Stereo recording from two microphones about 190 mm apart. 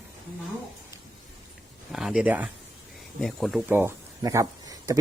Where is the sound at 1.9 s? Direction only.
5° right (ahead or behind); by 5.0 s 20° right (ahead or behind).